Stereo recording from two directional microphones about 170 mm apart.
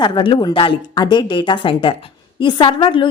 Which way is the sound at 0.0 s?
30° left (ahead or behind).